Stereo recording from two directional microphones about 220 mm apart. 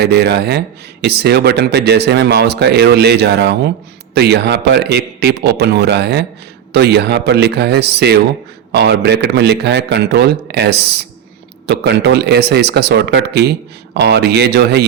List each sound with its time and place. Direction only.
0.0 s a man's voice: 50° right (ahead or behind)